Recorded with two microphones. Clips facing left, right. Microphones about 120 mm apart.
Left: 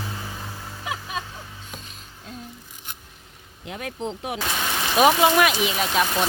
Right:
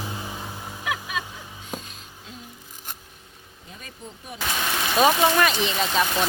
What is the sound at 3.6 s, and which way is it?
Speech, 80° left.